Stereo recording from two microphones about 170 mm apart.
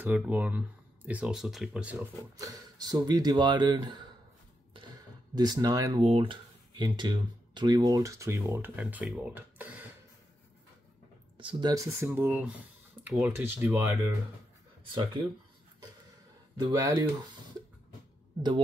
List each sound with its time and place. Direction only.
0.0 s speech: 10° right (ahead or behind)
2.3 s speech: 20° right (ahead or behind)
5.3 s speech: 25° right (ahead or behind)
11.3 s speech: 20° right (ahead or behind)
16.5 s speech: 20° right (ahead or behind)